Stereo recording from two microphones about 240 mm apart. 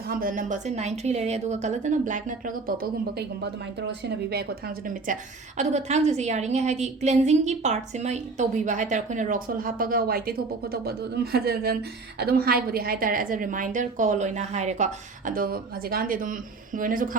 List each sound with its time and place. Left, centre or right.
0.1 s a woman's voice: right
5.5 s a woman's voice: right